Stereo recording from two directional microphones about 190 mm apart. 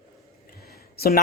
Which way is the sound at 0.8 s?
55° left (ahead or behind).